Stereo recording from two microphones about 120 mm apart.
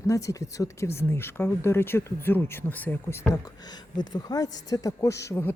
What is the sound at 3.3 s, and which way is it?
Speech, 35° left (ahead or behind).